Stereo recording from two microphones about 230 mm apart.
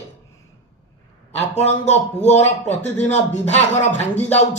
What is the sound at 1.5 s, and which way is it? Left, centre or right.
Speech, left.